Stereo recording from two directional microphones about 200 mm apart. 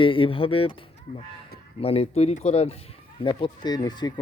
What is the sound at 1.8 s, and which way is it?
A man's voice, 30° left (ahead or behind).